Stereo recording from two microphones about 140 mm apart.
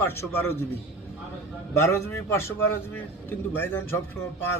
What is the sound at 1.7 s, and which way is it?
A man's voice, 20° left (ahead or behind).